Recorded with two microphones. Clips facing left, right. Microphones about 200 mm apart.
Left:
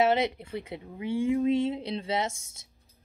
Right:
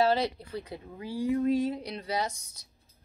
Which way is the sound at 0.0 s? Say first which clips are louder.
Left 1 dB; 20° left (ahead or behind).